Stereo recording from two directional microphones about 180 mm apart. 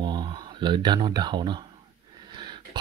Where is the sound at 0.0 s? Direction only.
25° right (ahead or behind).